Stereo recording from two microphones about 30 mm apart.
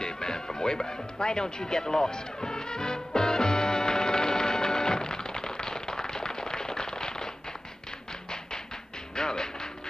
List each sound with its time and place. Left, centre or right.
0.0 s music: left
9.1 s music: left